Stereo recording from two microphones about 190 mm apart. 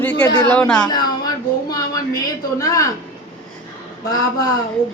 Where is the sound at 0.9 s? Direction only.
20° left (ahead or behind).